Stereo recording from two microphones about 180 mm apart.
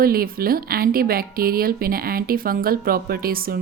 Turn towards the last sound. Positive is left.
turn(degrees=-55)  # may be behind; listen again after turning